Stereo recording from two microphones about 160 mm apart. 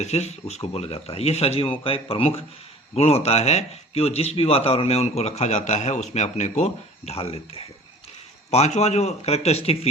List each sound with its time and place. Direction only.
0.0 s a man's voice: 40° left (ahead or behind)